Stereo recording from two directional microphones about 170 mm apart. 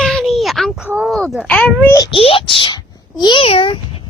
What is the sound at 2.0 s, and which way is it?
A child's voice, 30° left (ahead or behind).